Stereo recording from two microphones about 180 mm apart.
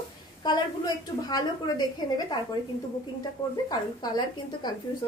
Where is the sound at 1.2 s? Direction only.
20° left (ahead or behind).